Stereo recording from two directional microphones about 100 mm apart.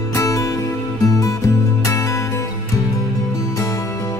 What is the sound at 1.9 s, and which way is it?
Music, 30° left (ahead or behind).